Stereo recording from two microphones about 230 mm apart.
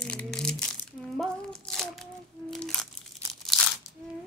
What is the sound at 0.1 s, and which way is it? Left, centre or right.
Crumpling, centre.